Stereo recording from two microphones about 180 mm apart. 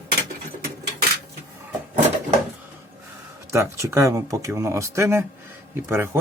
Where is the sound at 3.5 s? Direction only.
15° right (ahead or behind).